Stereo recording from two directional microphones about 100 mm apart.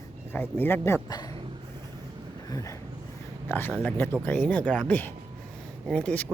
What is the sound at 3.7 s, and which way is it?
Speech, 10° left (ahead or behind).